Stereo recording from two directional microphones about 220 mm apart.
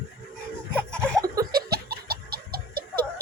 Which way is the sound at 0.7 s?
5° left (ahead or behind).